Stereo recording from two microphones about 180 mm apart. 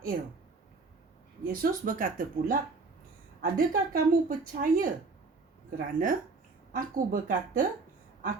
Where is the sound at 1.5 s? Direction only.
50° right (ahead or behind).